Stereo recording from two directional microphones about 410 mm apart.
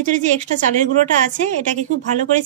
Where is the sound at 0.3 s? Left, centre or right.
Centre.